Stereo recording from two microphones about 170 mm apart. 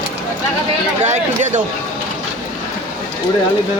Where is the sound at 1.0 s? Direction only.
45° right (ahead or behind).